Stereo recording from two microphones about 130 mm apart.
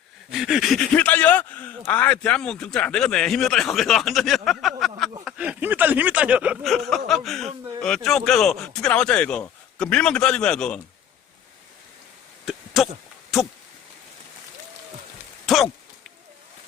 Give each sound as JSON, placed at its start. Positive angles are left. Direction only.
{"t": 0.3, "sound": "a man's voice", "side_deg": -5}
{"t": 0.9, "sound": "a man's voice", "side_deg": 15}
{"t": 5.2, "sound": "speech", "side_deg": -10}
{"t": 6.7, "sound": "a man's voice", "side_deg": 0}
{"t": 12.5, "sound": "a sound", "side_deg": 0}
{"t": 15.4, "sound": "speech", "side_deg": 0}